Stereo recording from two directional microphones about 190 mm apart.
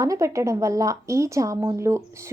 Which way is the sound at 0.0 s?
15° right (ahead or behind).